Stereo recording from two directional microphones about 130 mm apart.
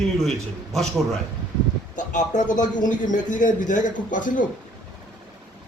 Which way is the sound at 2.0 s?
75° left (ahead or behind).